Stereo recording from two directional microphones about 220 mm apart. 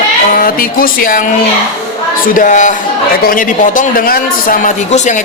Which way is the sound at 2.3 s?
35° left (ahead or behind).